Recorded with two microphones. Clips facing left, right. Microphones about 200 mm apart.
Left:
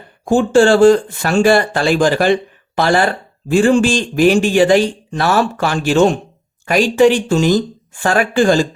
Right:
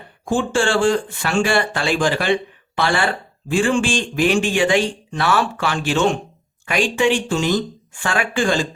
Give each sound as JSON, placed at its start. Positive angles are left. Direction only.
{"t": 0.3, "sound": "speech", "side_deg": 40}